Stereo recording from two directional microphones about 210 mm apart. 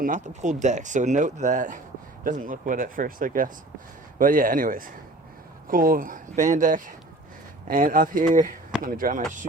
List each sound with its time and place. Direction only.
0.0 s speech: 35° right (ahead or behind)